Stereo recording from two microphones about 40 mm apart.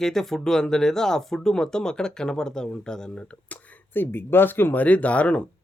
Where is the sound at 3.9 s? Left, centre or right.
Left.